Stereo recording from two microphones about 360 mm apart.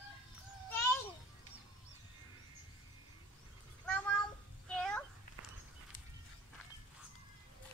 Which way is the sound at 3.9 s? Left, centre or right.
Centre.